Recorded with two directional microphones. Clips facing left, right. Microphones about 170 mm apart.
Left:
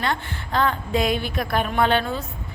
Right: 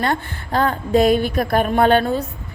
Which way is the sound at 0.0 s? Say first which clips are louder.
Right 4 dB; 45° right (ahead or behind).